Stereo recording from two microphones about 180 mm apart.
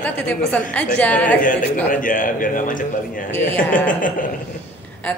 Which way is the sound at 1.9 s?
50° left (ahead or behind).